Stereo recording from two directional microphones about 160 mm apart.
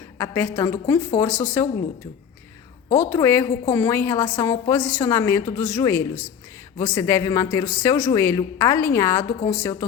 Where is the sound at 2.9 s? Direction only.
15° left (ahead or behind).